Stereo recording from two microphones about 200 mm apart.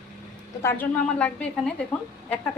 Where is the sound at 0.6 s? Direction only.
5° left (ahead or behind).